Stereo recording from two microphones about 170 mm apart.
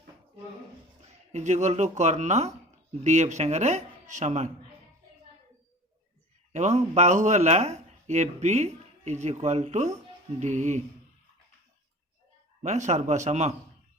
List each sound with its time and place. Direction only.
1.0 s speech: 40° right (ahead or behind)
6.5 s speech: 45° right (ahead or behind)
12.6 s speech: 45° right (ahead or behind)